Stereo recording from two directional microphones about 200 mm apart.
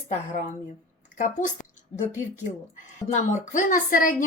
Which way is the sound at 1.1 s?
40° left (ahead or behind).